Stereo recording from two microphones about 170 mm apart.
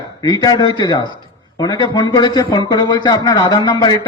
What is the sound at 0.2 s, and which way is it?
A man's voice, 25° left (ahead or behind).